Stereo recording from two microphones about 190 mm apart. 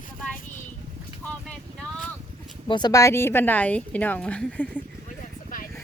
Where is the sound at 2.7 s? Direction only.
20° left (ahead or behind).